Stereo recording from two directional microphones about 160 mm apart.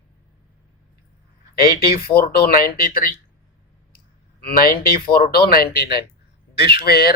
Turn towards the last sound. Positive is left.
turn(degrees=75)  # may be behind; listen again after turning